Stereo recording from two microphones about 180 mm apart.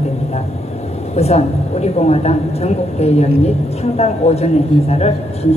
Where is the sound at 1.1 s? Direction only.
35° left (ahead or behind).